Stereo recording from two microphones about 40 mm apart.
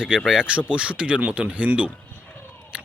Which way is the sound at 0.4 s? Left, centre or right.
Right.